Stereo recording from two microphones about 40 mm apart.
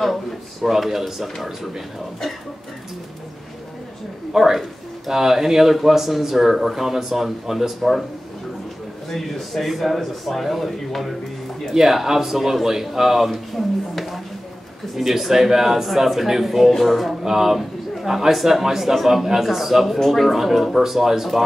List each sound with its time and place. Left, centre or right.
0.0 s speech: centre
4.3 s speech: centre
9.1 s speech: centre